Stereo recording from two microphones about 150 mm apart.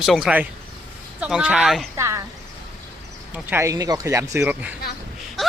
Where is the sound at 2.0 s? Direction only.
20° right (ahead or behind).